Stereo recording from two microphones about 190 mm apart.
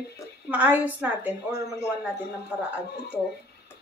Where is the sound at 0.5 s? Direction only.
10° right (ahead or behind).